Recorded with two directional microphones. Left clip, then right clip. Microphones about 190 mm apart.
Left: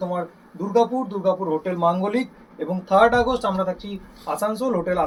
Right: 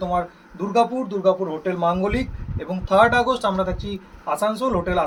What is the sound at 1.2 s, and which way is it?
Speech, 20° right (ahead or behind).